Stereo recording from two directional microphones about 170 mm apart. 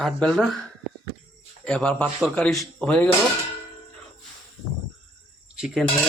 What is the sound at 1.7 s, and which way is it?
Speech, 5° left (ahead or behind).